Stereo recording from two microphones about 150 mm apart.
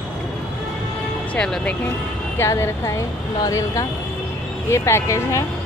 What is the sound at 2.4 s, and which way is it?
Speech, 20° left (ahead or behind).